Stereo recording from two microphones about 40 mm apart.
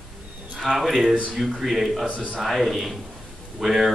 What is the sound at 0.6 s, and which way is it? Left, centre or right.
Speech, centre.